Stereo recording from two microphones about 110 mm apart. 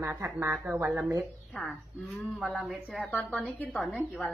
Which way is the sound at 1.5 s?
Centre (ahead or behind).